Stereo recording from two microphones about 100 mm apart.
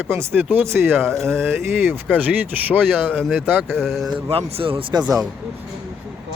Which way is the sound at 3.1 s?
5° left (ahead or behind).